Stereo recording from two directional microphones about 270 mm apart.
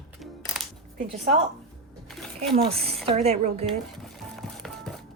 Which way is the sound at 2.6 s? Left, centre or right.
Right.